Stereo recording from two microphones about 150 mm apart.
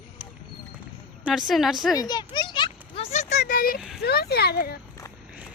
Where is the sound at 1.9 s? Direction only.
25° left (ahead or behind); by 3.5 s 50° left (ahead or behind).